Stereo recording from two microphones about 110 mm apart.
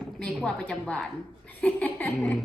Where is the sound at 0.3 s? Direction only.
5° left (ahead or behind).